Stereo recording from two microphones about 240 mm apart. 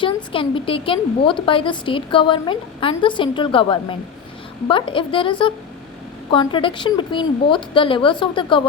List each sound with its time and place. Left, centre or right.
0.3 s a woman's voice: left